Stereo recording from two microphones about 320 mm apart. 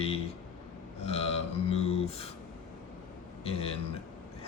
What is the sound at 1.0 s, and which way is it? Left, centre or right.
Mantra, centre.